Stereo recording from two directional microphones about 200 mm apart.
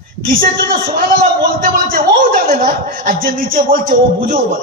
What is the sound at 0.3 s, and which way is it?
A man's voice, 45° right (ahead or behind).